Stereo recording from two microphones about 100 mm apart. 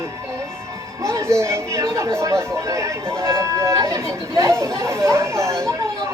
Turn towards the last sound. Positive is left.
turn(degrees=-30)  # may be behind; listen again after turning